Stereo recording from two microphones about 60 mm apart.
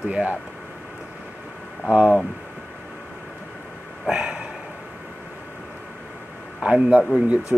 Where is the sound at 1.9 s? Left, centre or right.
Centre.